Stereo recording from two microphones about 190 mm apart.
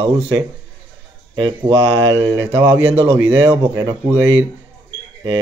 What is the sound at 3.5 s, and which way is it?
Speech, 20° right (ahead or behind).